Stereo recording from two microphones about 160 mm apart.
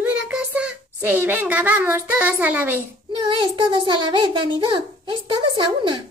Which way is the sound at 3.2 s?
30° right (ahead or behind).